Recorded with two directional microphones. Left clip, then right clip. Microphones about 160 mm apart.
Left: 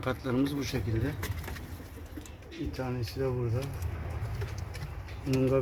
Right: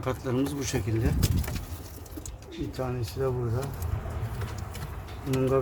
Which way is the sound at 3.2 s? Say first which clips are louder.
Right 3 dB; 5° left (ahead or behind).